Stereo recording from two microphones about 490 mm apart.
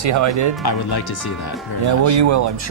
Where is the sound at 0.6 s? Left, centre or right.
Left.